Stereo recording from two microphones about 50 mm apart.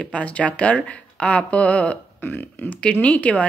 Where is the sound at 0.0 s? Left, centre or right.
Left.